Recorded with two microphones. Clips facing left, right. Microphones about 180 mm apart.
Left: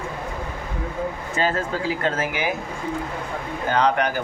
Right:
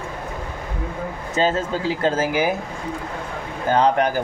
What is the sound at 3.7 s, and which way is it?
Speech, 30° right (ahead or behind).